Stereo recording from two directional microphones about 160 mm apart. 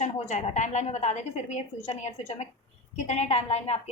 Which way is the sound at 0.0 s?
45° left (ahead or behind).